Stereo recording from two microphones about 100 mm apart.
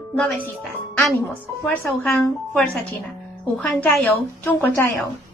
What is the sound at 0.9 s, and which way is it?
Speech, 15° left (ahead or behind).